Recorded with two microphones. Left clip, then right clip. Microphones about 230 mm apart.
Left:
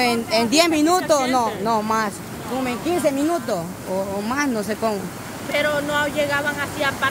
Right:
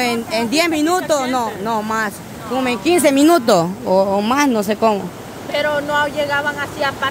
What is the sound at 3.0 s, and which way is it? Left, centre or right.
Speech, right.